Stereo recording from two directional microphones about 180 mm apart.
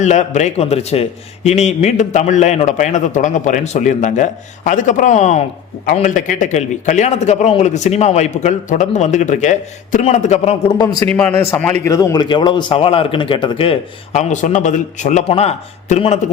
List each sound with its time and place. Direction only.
0.0 s a man's voice: 40° left (ahead or behind)
10.8 s speech: 20° left (ahead or behind); by 16.2 s 40° left (ahead or behind)